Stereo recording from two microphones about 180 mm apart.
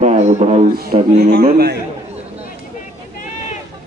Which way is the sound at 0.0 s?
40° right (ahead or behind).